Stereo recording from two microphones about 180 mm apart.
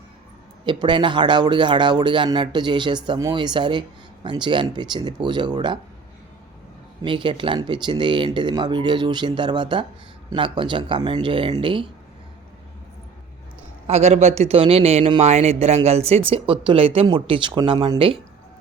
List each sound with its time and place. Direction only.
0.6 s a man's voice: 25° right (ahead or behind)
7.0 s a man's voice: 25° right (ahead or behind)
13.8 s a man's voice: 35° right (ahead or behind)